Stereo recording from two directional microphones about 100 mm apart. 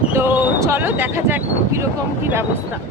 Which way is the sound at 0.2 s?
25° right (ahead or behind).